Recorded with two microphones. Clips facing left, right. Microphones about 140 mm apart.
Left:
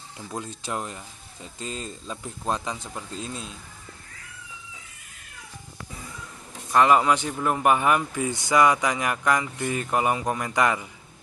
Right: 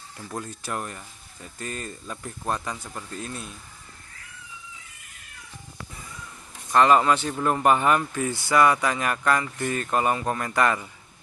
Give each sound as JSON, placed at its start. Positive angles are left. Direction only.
{"t": 0.2, "sound": "speech", "side_deg": 15}
{"t": 6.7, "sound": "speech", "side_deg": 10}